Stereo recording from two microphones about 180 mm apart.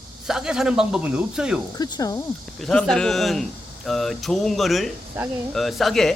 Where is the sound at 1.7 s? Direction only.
20° left (ahead or behind).